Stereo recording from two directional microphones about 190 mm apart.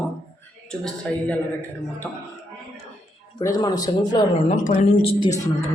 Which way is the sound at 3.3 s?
20° left (ahead or behind).